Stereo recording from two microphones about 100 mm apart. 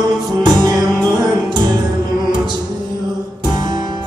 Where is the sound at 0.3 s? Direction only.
40° right (ahead or behind).